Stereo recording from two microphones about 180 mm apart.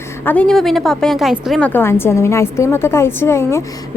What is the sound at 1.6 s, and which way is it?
A woman's voice, 10° left (ahead or behind).